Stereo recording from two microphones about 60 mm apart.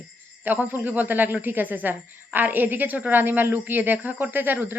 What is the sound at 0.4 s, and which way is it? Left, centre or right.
Speech, right.